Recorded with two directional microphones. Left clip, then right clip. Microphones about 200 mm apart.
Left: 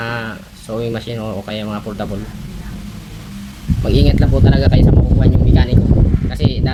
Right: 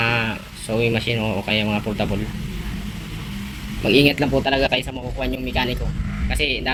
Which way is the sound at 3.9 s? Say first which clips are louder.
Right 2 dB; 15° left (ahead or behind).